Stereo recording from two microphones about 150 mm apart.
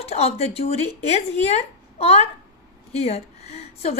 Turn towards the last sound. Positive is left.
turn(degrees=45)  # may be behind; listen again after turning